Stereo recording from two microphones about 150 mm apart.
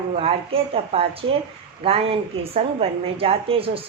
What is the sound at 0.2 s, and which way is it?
Speech, 40° right (ahead or behind).